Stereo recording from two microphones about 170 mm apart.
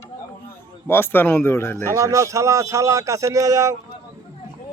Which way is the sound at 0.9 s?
15° left (ahead or behind).